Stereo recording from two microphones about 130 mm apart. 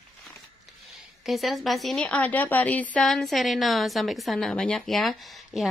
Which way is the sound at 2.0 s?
10° left (ahead or behind).